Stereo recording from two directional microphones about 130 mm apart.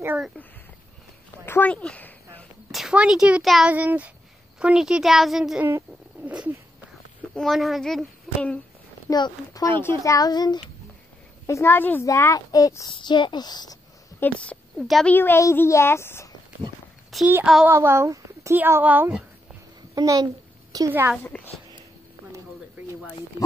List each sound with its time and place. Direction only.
1.4 s a sound: 15° left (ahead or behind)
2.7 s speech: 5° right (ahead or behind)
5.6 s a sound: 15° right (ahead or behind)
7.3 s speech: centre (ahead or behind)
9.1 s a woman's voice: 30° left (ahead or behind)
11.4 s a woman's voice: 20° left (ahead or behind)
12.9 s speech: 35° left (ahead or behind)
14.2 s speech: 10° left (ahead or behind)
15.1 s a woman's voice: 20° left (ahead or behind)
17.1 s speech: centre (ahead or behind)
17.6 s speech: 20° right (ahead or behind)
20.0 s a child's voice: 30° right (ahead or behind)
20.9 s speech: 15° right (ahead or behind)